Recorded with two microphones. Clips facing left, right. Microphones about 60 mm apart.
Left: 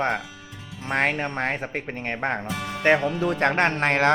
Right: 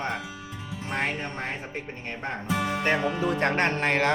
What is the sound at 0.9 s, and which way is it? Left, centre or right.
Speech, left.